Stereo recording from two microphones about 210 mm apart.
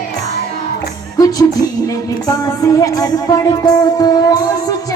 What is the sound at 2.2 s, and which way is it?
Music, 15° left (ahead or behind).